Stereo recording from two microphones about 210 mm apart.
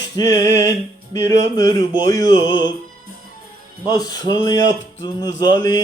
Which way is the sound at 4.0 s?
20° left (ahead or behind).